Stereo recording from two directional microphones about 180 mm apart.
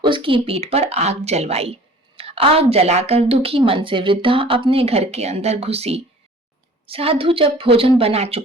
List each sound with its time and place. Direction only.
0.0 s a woman's voice: 25° right (ahead or behind)